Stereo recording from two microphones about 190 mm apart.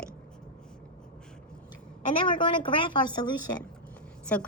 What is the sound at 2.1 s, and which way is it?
Speech, 25° left (ahead or behind).